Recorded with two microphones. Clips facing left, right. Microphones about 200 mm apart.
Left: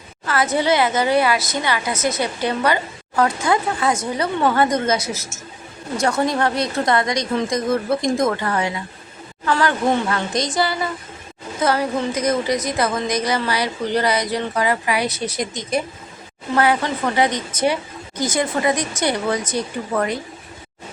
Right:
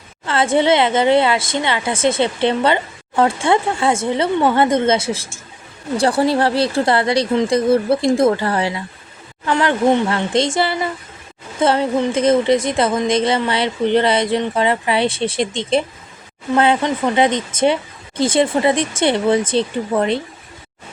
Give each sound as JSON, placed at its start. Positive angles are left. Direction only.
{"t": 0.3, "sound": "a woman's voice", "side_deg": -25}